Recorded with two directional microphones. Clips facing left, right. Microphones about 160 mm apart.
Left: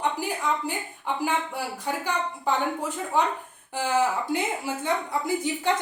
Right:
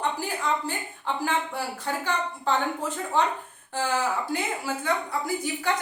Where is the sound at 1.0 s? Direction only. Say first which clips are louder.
Even; 15° left (ahead or behind).